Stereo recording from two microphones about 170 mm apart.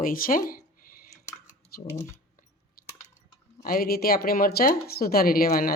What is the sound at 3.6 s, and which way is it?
Speech, 60° left (ahead or behind).